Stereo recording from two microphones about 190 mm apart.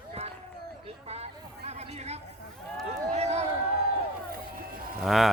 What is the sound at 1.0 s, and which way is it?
Chatter, 35° right (ahead or behind).